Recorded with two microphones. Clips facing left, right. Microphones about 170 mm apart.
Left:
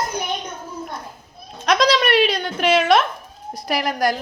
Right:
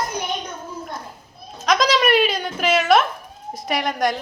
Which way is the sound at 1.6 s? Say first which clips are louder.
Left 1 dB; centre (ahead or behind).